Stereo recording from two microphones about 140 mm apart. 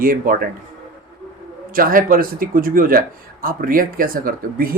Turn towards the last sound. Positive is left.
turn(degrees=-90)